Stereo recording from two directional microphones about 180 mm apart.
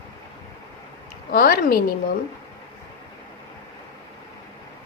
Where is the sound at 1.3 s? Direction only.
55° left (ahead or behind).